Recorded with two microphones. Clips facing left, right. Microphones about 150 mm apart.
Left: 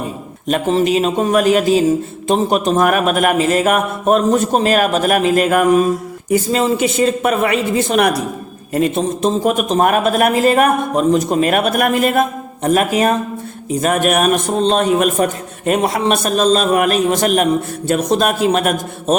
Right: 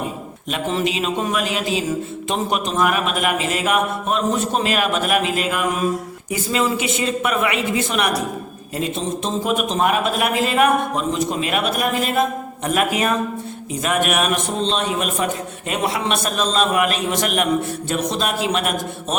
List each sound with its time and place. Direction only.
0.4 s a man's voice: 40° left (ahead or behind)
8.7 s a man's voice: 55° left (ahead or behind)
12.6 s a woman's voice: 40° left (ahead or behind)